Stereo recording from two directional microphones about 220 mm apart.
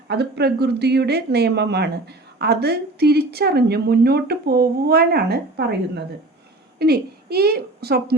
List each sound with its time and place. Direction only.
0.1 s a woman's voice: 50° right (ahead or behind)